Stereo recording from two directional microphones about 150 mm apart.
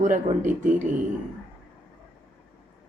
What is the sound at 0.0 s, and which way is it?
Speech, 55° right (ahead or behind).